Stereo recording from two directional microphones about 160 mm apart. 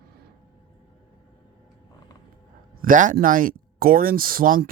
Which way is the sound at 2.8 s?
55° right (ahead or behind).